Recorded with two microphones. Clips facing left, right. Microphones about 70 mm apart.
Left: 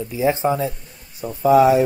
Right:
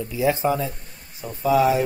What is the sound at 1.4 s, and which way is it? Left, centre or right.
Speech, left.